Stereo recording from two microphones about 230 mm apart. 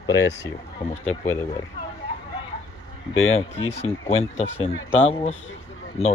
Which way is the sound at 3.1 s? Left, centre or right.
Left.